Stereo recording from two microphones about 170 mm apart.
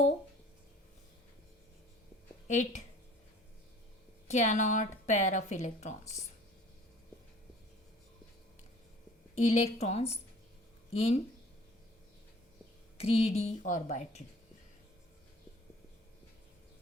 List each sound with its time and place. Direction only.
2.5 s a woman's voice: 45° left (ahead or behind)
4.3 s a woman's voice: 45° left (ahead or behind)
9.3 s a woman's voice: 40° left (ahead or behind)
13.0 s a woman's voice: 35° left (ahead or behind)